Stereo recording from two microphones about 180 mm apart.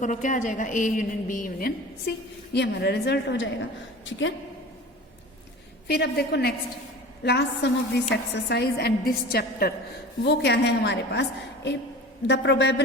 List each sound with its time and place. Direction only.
0.0 s a woman's voice: 45° left (ahead or behind); by 3.5 s 75° left (ahead or behind)
4.0 s a woman's voice: 90° left
5.9 s a woman's voice: 65° left (ahead or behind)
10.2 s a woman's voice: 70° left (ahead or behind)